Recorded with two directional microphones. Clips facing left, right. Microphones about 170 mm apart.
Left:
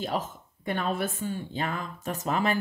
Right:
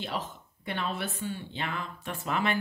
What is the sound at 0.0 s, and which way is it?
Speech, 45° left (ahead or behind).